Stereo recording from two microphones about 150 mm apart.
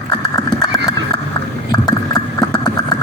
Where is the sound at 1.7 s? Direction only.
25° left (ahead or behind).